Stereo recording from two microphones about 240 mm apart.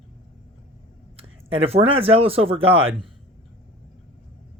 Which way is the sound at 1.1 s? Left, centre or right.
Right.